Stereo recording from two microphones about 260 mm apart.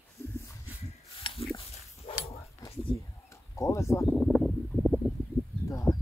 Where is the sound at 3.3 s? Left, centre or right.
Centre.